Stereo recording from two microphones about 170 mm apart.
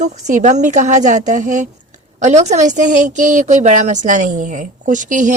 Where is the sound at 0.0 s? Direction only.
45° right (ahead or behind).